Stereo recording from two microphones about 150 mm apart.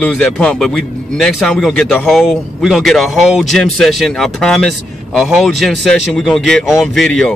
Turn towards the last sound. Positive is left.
turn(degrees=0)  # may be behind; listen again after turning